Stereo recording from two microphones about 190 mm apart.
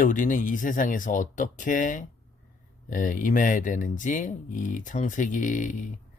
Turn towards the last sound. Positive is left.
turn(degrees=40)  # may be behind; listen again after turning